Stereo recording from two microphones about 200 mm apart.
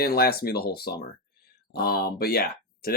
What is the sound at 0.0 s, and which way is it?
Speech, 50° left (ahead or behind).